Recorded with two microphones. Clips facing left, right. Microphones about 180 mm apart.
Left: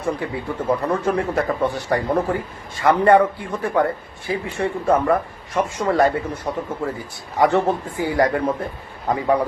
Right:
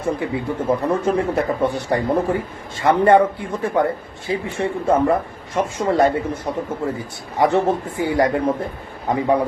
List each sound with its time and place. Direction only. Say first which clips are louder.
0.0 s speech: right 2 dB; 20° right (ahead or behind)